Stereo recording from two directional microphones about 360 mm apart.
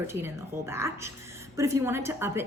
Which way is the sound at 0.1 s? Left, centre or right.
Centre.